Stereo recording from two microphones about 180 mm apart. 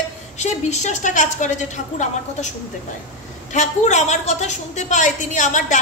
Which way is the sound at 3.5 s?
40° left (ahead or behind).